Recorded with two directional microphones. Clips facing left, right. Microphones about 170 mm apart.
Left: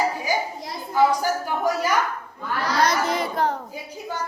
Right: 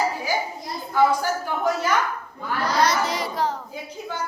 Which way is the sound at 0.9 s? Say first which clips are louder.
Even; 10° left (ahead or behind).